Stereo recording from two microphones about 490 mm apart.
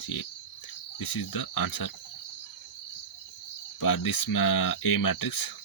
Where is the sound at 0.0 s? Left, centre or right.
Left.